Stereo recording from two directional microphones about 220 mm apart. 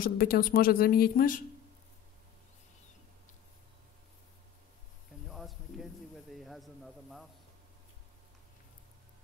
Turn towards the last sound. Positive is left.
turn(degrees=0)  # may be behind; listen again after turning